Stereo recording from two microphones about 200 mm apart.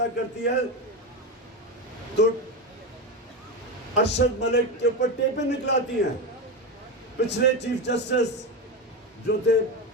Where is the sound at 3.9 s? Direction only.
60° left (ahead or behind).